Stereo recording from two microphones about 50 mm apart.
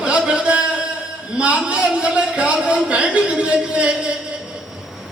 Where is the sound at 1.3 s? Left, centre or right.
Right.